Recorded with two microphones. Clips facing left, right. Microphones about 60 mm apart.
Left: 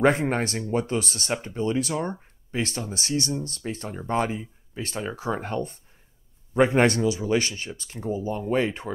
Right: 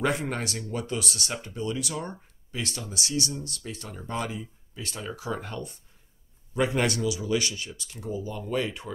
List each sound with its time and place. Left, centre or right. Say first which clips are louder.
0.0 s speech: left 6 dB; left